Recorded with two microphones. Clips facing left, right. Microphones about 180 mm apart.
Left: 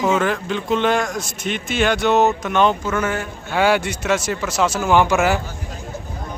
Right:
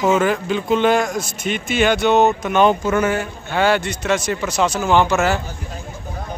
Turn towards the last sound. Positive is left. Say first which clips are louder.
# even
turn(degrees=10)  # may be behind; listen again after turning